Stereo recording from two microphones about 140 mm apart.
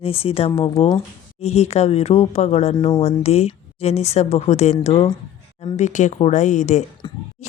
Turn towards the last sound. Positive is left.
turn(degrees=35)  # may be behind; listen again after turning